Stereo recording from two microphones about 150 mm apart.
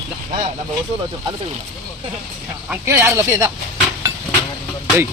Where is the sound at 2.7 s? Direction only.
15° right (ahead or behind).